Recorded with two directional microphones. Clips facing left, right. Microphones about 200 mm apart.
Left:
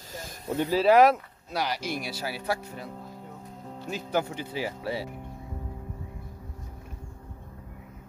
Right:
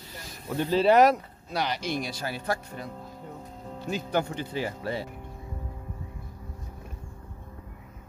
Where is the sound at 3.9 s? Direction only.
5° left (ahead or behind).